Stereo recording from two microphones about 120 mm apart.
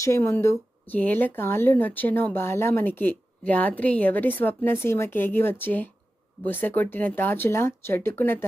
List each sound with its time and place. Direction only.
0.0 s speech: 25° left (ahead or behind)